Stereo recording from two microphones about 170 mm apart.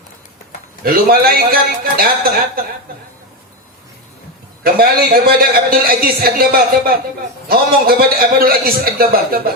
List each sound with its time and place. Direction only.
0.9 s a man's voice: 60° right (ahead or behind)
4.6 s a man's voice: 60° right (ahead or behind)